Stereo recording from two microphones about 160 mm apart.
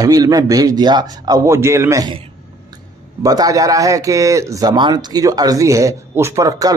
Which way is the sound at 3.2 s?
20° right (ahead or behind).